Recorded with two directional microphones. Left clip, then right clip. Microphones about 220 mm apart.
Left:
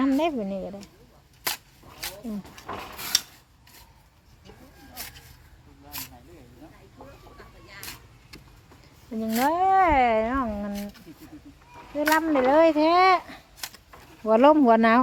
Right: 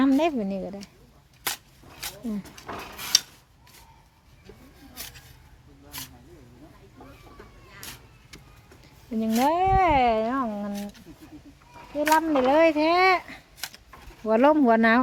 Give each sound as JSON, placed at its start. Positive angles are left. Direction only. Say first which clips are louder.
{"t": 0.0, "sound": "a woman's voice", "louder": "right 2 dB", "side_deg": -15}
{"t": 9.2, "sound": "speech", "louder": "right 1 dB", "side_deg": 5}
{"t": 9.5, "sound": "speech", "louder": "left 1 dB", "side_deg": -5}
{"t": 11.9, "sound": "a child's voice", "louder": "right 1 dB", "side_deg": 5}